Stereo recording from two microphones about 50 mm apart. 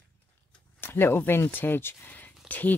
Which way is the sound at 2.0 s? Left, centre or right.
Left.